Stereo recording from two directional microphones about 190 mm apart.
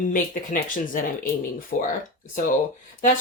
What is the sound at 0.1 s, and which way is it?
Speech, 45° left (ahead or behind).